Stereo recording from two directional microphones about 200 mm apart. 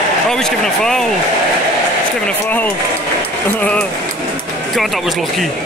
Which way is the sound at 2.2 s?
10° left (ahead or behind).